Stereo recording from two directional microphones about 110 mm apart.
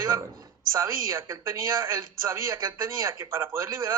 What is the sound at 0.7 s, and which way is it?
Speech, 25° right (ahead or behind).